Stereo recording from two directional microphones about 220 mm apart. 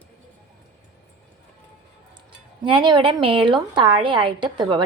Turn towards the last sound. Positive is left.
turn(degrees=-20)  # may be behind; listen again after turning